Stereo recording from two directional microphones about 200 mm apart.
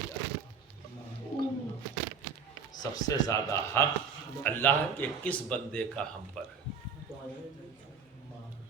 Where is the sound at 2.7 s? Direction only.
20° left (ahead or behind).